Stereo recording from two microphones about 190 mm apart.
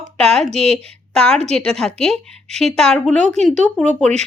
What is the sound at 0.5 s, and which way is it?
Speech, 35° right (ahead or behind).